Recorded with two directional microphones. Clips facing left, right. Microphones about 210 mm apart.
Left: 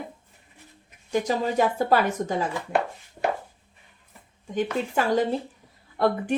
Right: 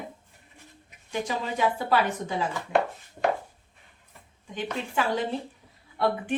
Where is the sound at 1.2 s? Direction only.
45° left (ahead or behind).